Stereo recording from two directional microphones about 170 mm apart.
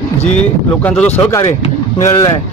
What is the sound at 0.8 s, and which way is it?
Speech, 5° left (ahead or behind).